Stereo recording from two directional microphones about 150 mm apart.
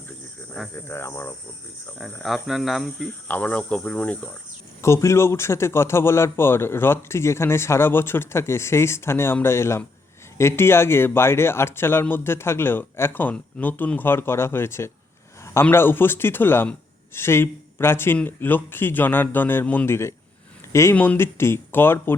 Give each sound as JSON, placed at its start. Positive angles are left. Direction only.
{"t": 0.9, "sound": "a man's voice", "side_deg": 15}
{"t": 2.0, "sound": "speech", "side_deg": 0}
{"t": 3.1, "sound": "a man's voice", "side_deg": 10}